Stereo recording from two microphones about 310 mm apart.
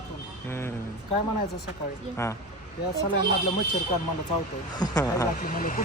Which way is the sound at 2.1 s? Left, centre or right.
Centre.